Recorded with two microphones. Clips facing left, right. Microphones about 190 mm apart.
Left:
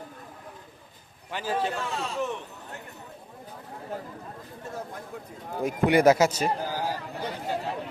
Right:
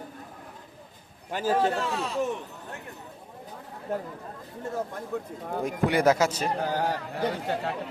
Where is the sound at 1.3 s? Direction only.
45° right (ahead or behind).